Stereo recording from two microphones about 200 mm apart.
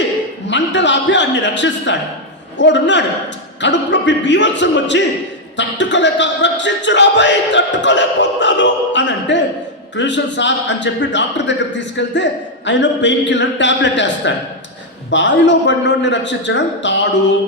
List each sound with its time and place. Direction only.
0.4 s speech: 65° left (ahead or behind)